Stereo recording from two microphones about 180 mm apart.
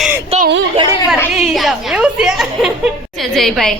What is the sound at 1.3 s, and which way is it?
A woman's voice, 5° right (ahead or behind).